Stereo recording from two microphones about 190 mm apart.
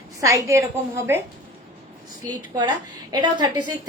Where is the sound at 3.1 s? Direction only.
20° right (ahead or behind).